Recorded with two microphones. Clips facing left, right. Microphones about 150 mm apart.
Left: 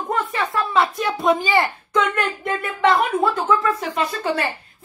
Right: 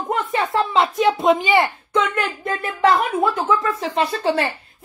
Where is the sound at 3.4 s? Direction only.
25° right (ahead or behind).